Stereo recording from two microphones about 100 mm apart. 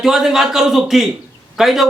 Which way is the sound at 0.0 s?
5° right (ahead or behind).